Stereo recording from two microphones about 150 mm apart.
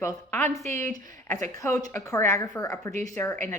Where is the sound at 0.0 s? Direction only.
15° left (ahead or behind).